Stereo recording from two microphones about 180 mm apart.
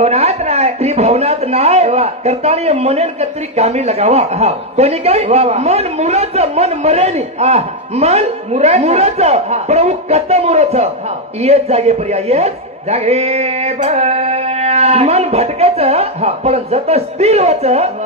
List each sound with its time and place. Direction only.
0.0 s a man's voice: 35° right (ahead or behind)